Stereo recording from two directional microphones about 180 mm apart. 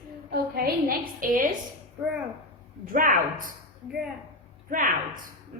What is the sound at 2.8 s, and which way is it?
Speech, 50° right (ahead or behind).